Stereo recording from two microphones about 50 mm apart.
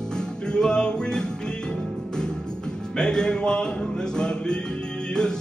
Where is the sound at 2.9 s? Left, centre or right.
Centre.